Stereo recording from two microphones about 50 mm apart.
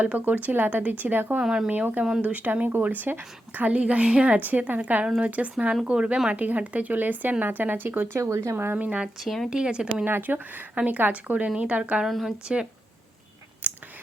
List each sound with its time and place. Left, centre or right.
0.0 s speech: right
0.4 s a woman's voice: right
1.4 s speech: centre
1.7 s a woman's voice: right
6.3 s a woman's voice: right
8.2 s speech: right
8.7 s a woman's voice: right
9.2 s speech: centre
9.5 s speech: centre
10.1 s a woman's voice: right
11.4 s speech: right
12.0 s speech: centre
13.6 s a sound: right